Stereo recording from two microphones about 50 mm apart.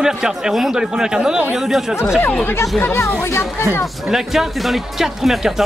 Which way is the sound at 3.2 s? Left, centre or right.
Left.